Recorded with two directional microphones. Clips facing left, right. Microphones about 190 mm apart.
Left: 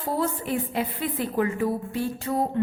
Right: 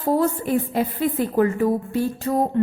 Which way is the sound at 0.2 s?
40° right (ahead or behind).